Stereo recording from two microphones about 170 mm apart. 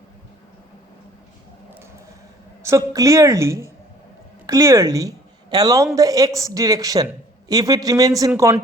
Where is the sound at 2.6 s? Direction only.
20° right (ahead or behind).